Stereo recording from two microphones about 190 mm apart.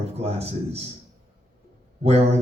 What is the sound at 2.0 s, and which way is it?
Speech, 35° right (ahead or behind).